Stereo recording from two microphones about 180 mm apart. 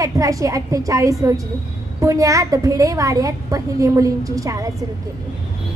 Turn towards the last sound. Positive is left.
turn(degrees=-20)  # may be behind; listen again after turning